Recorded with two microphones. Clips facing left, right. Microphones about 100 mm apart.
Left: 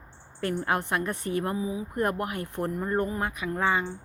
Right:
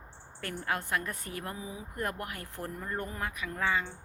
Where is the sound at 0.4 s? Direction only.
25° left (ahead or behind).